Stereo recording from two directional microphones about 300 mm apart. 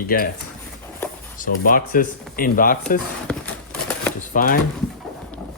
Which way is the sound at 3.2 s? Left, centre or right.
Centre.